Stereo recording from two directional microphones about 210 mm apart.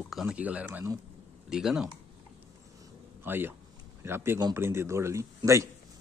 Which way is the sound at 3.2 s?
10° right (ahead or behind).